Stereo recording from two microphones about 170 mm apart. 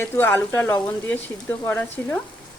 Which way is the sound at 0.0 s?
10° left (ahead or behind).